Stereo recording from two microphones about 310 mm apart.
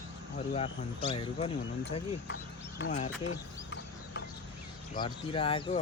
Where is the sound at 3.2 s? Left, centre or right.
Left.